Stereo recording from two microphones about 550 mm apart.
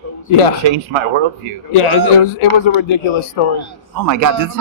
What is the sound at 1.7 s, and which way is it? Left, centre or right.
Speech, left.